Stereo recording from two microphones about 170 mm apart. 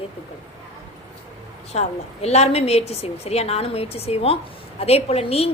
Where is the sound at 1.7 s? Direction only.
40° left (ahead or behind).